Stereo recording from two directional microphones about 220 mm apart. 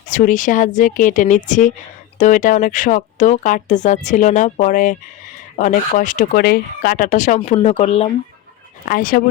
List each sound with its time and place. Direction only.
0.1 s speech: 35° left (ahead or behind)
8.9 s speech: 40° left (ahead or behind)